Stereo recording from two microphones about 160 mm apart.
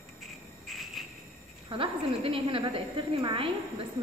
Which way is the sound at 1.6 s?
35° right (ahead or behind).